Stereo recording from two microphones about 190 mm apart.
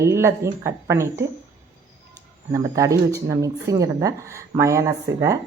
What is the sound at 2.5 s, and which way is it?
Speech, 15° right (ahead or behind).